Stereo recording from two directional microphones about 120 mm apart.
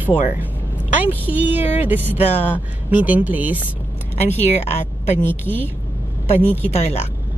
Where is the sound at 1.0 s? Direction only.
15° right (ahead or behind).